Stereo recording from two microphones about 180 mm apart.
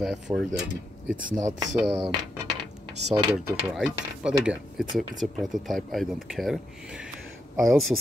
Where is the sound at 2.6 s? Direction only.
40° right (ahead or behind).